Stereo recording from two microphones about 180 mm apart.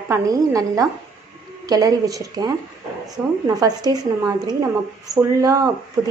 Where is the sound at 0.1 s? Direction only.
20° right (ahead or behind).